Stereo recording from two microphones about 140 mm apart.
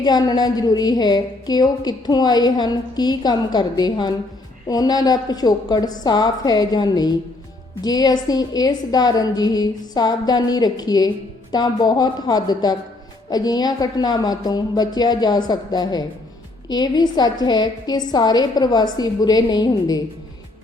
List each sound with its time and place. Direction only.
0.0 s a woman's voice: 30° left (ahead or behind)